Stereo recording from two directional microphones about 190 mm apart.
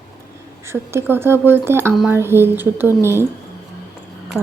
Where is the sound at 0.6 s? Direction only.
15° right (ahead or behind).